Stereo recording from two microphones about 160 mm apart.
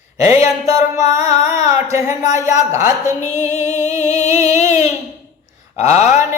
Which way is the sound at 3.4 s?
45° left (ahead or behind).